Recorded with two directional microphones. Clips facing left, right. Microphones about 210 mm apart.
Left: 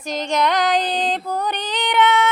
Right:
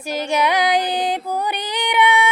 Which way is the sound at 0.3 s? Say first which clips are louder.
Even; 10° right (ahead or behind).